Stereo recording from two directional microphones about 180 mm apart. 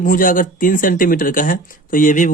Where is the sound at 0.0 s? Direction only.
50° left (ahead or behind).